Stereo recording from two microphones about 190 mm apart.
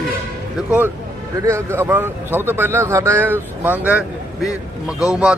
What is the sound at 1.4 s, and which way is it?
A man's voice, 15° right (ahead or behind).